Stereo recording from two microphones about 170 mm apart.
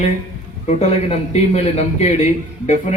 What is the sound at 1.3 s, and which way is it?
Speech, 40° left (ahead or behind).